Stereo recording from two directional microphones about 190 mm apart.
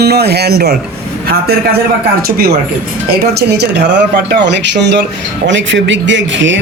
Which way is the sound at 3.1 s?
60° right (ahead or behind).